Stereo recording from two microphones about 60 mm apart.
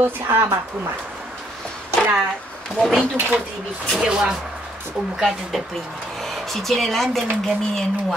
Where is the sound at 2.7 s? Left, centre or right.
Centre.